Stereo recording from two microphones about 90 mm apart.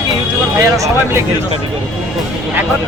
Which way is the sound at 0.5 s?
35° right (ahead or behind).